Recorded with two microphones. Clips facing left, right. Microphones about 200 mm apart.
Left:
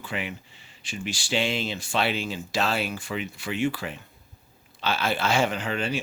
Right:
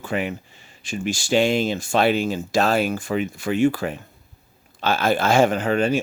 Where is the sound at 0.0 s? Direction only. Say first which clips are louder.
Right 8 dB; 45° right (ahead or behind).